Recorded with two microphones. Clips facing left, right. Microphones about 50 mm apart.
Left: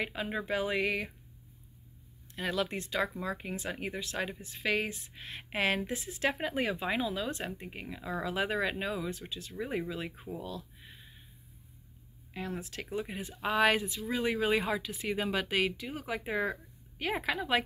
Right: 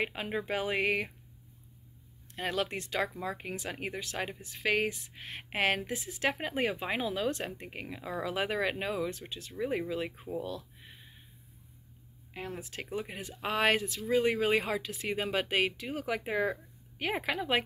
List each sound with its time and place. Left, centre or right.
0.0 s speech: right
2.3 s speech: right
7.1 s speech: right
12.4 s speech: right